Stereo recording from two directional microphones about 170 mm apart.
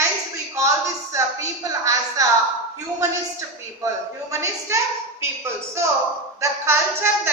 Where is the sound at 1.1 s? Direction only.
20° right (ahead or behind).